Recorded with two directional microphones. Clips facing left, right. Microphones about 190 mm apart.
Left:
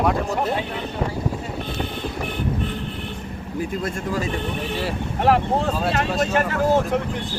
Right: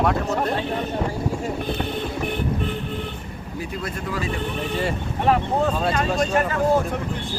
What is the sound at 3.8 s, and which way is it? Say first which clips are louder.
Speech: left 3 dB; 45° left (ahead or behind).